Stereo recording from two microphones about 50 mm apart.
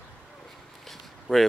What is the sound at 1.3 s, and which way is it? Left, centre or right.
Speech, right.